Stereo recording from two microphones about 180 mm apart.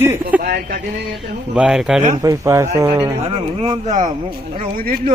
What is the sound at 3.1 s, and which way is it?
Speech, 35° right (ahead or behind).